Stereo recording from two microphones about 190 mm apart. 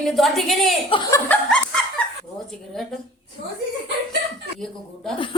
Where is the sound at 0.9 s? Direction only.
25° left (ahead or behind).